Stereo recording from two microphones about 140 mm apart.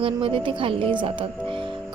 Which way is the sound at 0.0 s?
40° right (ahead or behind).